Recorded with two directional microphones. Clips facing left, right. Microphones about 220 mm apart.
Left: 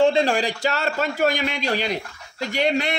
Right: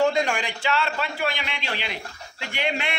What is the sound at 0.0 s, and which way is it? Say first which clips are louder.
A man's voice: left 4 dB; 30° left (ahead or behind).